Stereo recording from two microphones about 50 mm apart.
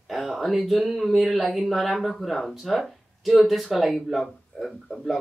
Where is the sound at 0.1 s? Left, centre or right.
Centre.